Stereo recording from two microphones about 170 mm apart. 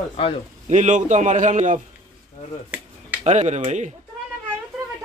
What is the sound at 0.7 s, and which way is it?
A man's voice, 45° right (ahead or behind).